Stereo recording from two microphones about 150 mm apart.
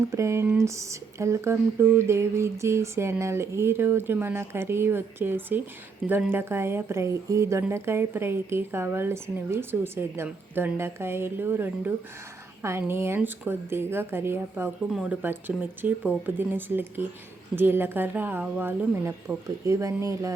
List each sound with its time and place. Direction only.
0.0 s speech: 20° right (ahead or behind)